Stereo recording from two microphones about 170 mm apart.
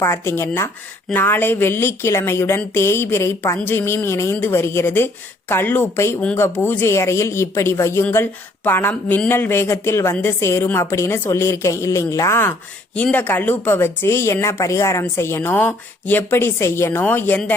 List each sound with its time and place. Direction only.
0.0 s a woman's voice: 15° left (ahead or behind)